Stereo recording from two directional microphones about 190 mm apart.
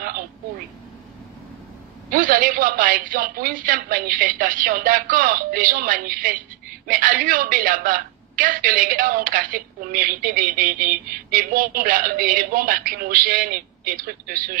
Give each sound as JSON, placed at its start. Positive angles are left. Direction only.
{"t": 2.0, "sound": "a woman's voice", "side_deg": -45}